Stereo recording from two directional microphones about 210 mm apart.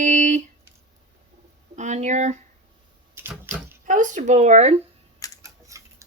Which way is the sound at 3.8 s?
40° right (ahead or behind).